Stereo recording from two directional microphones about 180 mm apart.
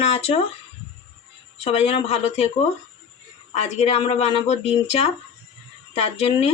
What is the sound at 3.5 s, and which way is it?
Speech, 35° left (ahead or behind).